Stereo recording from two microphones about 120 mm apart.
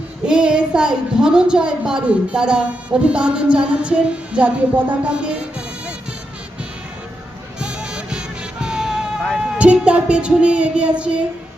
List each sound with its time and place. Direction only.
0.3 s a woman's voice: 10° right (ahead or behind)
7.6 s music: 10° right (ahead or behind)
8.6 s a sound: 5° right (ahead or behind)
9.6 s a woman's voice: 10° right (ahead or behind)